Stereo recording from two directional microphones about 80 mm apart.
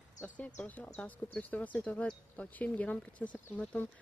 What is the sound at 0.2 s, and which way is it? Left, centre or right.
Speech, left.